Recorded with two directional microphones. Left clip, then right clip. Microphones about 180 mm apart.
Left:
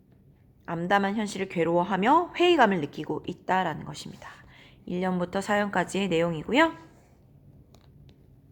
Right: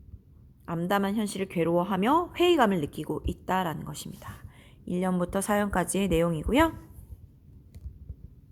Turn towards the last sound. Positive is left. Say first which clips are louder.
# left 1 dB
turn(degrees=-35)  # may be behind; listen again after turning